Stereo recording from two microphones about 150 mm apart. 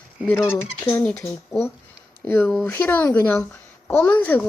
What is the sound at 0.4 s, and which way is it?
Speech, 15° left (ahead or behind).